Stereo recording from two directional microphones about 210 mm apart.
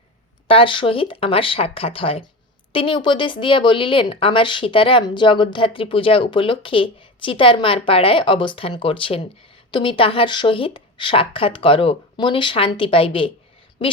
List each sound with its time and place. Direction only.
0.4 s speech: 25° left (ahead or behind)